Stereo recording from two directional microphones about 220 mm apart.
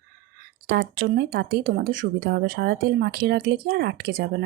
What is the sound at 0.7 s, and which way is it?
Speech, 50° right (ahead or behind).